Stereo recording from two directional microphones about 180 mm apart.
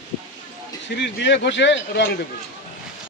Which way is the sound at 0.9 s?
80° left.